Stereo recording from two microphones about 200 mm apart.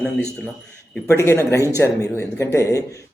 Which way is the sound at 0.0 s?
5° left (ahead or behind).